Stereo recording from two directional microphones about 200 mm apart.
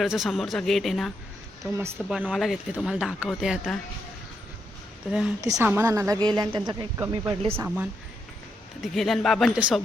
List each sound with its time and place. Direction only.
0.0 s speech: centre (ahead or behind)
5.4 s a woman's voice: 15° right (ahead or behind)
8.8 s speech: centre (ahead or behind)